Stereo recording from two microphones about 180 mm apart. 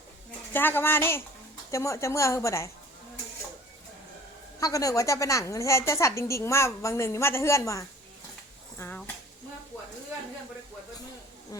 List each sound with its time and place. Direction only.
0.5 s a woman's voice: 10° left (ahead or behind)
4.6 s a woman's voice: 20° left (ahead or behind)